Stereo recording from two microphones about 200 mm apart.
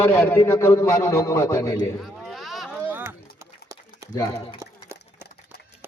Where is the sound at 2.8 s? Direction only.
10° right (ahead or behind).